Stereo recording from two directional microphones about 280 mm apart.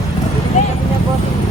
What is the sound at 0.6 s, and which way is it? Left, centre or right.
Vehicle, left.